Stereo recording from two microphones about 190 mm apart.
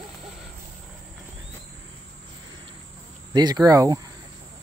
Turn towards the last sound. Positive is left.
turn(degrees=-20)  # may be behind; listen again after turning